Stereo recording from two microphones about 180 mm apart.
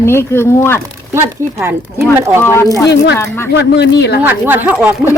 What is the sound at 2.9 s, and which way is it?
A woman's voice, 65° left (ahead or behind).